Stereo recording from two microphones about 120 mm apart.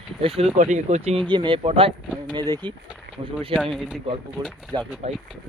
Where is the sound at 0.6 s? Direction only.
90° right; by 1.2 s 70° right (ahead or behind).